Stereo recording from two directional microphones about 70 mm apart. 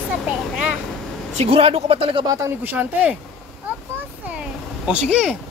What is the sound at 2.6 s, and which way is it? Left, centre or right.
Speech, right.